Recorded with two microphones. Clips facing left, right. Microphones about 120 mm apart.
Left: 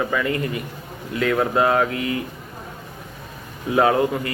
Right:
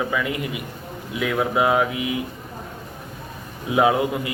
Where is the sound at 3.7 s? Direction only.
10° right (ahead or behind).